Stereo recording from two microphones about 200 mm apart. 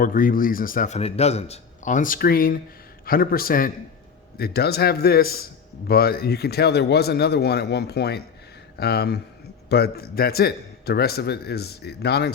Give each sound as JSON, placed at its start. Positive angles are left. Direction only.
{"t": 0.0, "sound": "a man's voice", "side_deg": 45}